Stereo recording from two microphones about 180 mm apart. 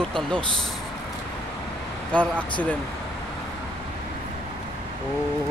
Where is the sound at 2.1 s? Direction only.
5° left (ahead or behind).